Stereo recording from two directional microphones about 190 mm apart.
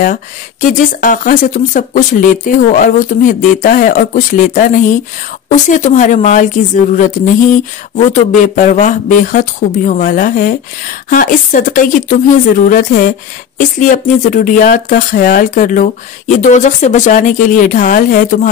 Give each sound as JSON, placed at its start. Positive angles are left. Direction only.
{"t": 0.0, "sound": "speech", "side_deg": 45}